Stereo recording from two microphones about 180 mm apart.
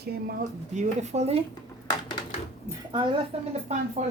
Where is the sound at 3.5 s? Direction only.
40° right (ahead or behind).